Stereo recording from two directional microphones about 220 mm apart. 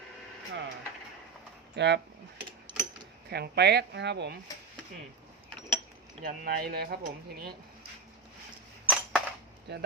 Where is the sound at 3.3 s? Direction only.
50° right (ahead or behind).